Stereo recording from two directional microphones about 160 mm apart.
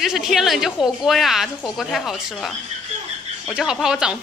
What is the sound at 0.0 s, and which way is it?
A woman's voice, centre (ahead or behind).